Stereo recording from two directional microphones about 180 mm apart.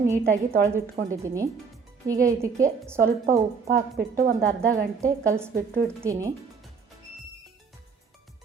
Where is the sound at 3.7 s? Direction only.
55° right (ahead or behind).